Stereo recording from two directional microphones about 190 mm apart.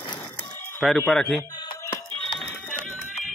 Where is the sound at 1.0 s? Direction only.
5° left (ahead or behind).